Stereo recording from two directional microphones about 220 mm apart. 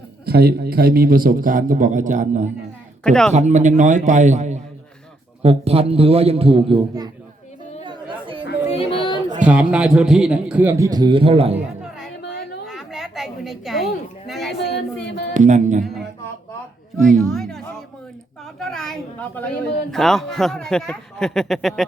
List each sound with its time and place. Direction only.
0.3 s a man's voice: 45° right (ahead or behind)
3.0 s a woman's voice: 5° left (ahead or behind)
3.3 s a man's voice: 30° right (ahead or behind)
7.9 s chatter: 20° right (ahead or behind)
8.7 s a sound: 25° left (ahead or behind)
9.4 s a woman's voice: 5° right (ahead or behind); by 11.5 s 25° right (ahead or behind)
11.5 s music: centre (ahead or behind)
12.6 s a sound: centre (ahead or behind)
15.0 s speech: 50° left (ahead or behind)
15.3 s a man's voice: 35° right (ahead or behind)
17.3 s a woman's voice: centre (ahead or behind)
18.6 s a woman's voice: centre (ahead or behind)